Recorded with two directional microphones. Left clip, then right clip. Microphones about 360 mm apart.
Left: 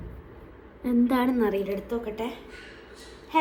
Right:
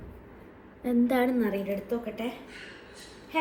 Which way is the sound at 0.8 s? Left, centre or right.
Centre.